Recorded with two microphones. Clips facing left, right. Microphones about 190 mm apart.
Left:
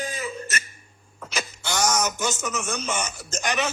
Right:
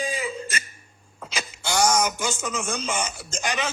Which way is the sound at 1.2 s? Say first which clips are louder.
Left 1 dB; 10° right (ahead or behind).